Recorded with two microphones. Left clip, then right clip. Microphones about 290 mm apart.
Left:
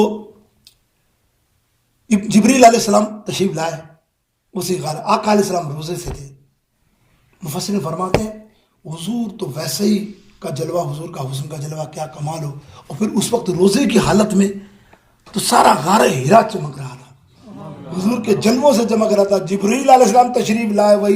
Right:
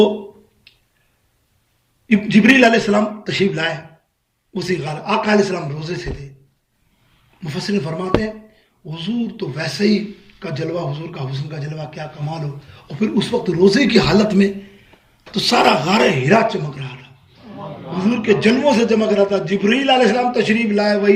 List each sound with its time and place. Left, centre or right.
2.0 s a man's voice: centre
7.3 s a man's voice: centre